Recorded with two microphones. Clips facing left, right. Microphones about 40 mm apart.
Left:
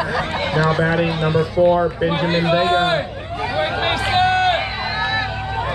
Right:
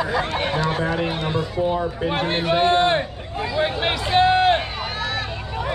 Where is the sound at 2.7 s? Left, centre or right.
Left.